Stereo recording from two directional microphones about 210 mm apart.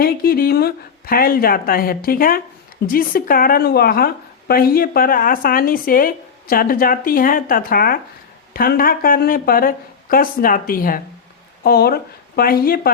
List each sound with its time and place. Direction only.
0.0 s a woman's voice: 45° left (ahead or behind)